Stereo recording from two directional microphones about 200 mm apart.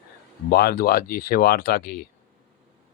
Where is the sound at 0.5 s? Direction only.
50° left (ahead or behind).